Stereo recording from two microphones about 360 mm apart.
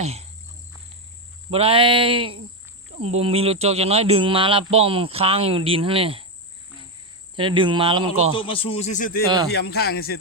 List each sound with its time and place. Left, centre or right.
0.0 s insect: centre
1.5 s speech: centre
7.3 s speech: centre
8.4 s speech: centre